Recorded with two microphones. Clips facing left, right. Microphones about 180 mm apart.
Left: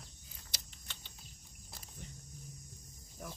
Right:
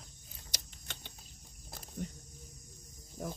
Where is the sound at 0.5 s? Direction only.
50° right (ahead or behind).